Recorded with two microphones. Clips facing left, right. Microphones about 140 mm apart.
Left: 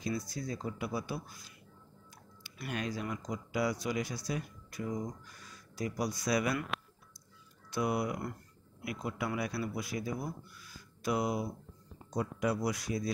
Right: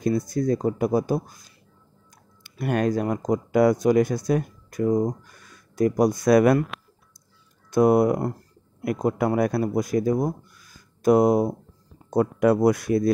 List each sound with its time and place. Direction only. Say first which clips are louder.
0.3 s speech: right 16 dB; 50° right (ahead or behind)
2.6 s speech: right 14 dB; 50° right (ahead or behind)
7.7 s speech: right 15 dB; 45° right (ahead or behind)
10.6 s a sound: right 16 dB; 45° right (ahead or behind)
12.4 s speech: right 14 dB; 55° right (ahead or behind)